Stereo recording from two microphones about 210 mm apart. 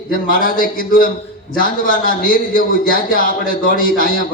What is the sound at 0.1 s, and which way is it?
A man's voice, 40° left (ahead or behind).